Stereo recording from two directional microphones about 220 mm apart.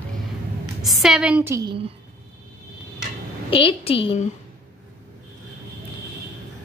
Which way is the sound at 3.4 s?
25° left (ahead or behind).